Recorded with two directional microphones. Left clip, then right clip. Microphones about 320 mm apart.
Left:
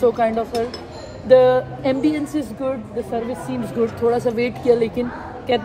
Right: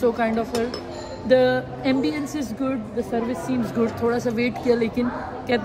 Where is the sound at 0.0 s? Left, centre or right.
Centre.